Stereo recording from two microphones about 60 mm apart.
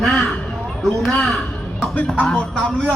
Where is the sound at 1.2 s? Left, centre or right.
Centre.